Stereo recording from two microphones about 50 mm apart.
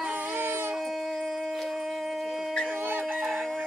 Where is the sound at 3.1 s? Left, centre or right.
Centre.